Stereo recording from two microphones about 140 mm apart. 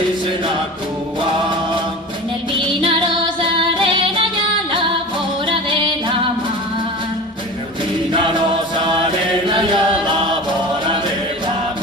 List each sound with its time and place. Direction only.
3.8 s music: 35° right (ahead or behind)
8.8 s chant: 35° right (ahead or behind)